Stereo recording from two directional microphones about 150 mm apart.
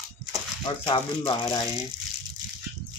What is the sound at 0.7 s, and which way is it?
Speech, 35° left (ahead or behind).